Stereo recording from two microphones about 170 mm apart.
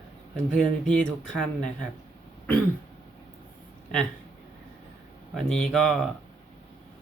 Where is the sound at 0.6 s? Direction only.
5° left (ahead or behind).